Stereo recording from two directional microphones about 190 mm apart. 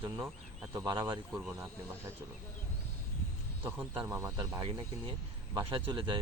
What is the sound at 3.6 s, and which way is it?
Speech, 10° right (ahead or behind).